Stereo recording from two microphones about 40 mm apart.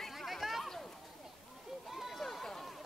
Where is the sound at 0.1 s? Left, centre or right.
Centre.